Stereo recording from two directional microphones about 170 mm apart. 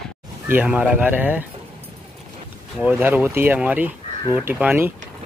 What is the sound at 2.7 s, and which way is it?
Speech, 10° right (ahead or behind).